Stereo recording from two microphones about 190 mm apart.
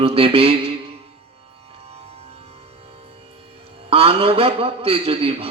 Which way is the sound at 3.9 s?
30° right (ahead or behind).